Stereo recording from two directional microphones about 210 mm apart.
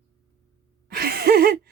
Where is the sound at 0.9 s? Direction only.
45° right (ahead or behind).